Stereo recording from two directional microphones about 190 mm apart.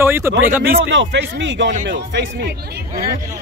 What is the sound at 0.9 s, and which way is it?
Speech, 75° right (ahead or behind).